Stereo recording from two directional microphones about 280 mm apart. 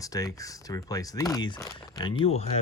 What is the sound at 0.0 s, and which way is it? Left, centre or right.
Speech, centre.